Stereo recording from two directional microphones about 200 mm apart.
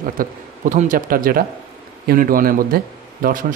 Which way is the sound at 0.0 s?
40° right (ahead or behind).